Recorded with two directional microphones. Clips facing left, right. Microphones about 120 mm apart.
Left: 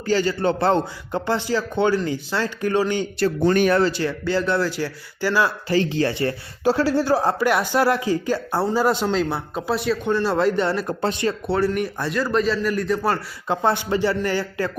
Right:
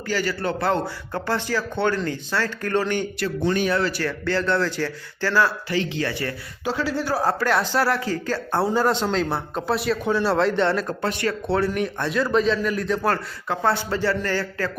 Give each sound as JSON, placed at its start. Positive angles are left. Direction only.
{"t": 0.0, "sound": "speech", "side_deg": 25}
{"t": 3.2, "sound": "speech", "side_deg": 40}
{"t": 3.5, "sound": "speech", "side_deg": 55}
{"t": 3.9, "sound": "speech", "side_deg": 15}
{"t": 5.6, "sound": "speech", "side_deg": 40}
{"t": 8.5, "sound": "speech", "side_deg": 5}
{"t": 11.0, "sound": "speech", "side_deg": 20}
{"t": 11.4, "sound": "speech", "side_deg": 0}
{"t": 13.5, "sound": "speech", "side_deg": 20}